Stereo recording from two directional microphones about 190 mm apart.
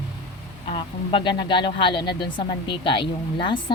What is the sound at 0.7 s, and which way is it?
Speech, 25° left (ahead or behind).